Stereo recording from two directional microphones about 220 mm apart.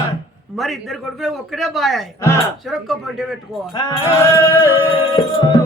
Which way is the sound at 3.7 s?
20° left (ahead or behind).